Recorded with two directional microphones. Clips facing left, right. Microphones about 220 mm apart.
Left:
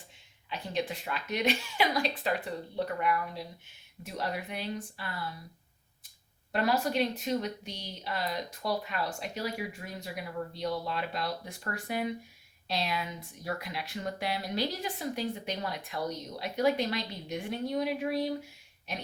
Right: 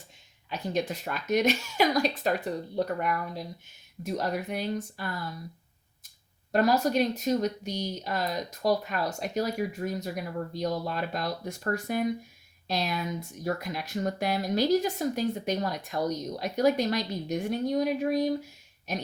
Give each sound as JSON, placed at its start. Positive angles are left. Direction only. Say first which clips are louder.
{"t": 0.5, "sound": "speech", "louder": "right 4 dB", "side_deg": -45}
{"t": 6.5, "sound": "speech", "louder": "right 5 dB", "side_deg": -40}